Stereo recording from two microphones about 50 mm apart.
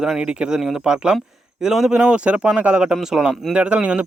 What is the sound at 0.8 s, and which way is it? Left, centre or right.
Speech, centre.